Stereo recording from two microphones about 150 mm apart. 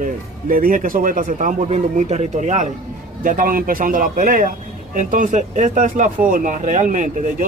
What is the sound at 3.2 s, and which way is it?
A man's voice, 70° right (ahead or behind).